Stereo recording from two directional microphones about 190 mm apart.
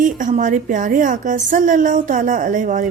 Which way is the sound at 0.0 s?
40° right (ahead or behind).